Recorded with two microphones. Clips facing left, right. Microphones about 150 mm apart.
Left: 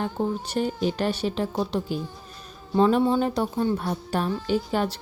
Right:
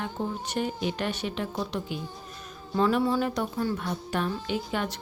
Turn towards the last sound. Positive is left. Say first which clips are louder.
# left 5 dB
turn(degrees=35)  # may be behind; listen again after turning